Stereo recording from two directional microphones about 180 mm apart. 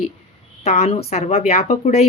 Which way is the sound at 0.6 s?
35° left (ahead or behind).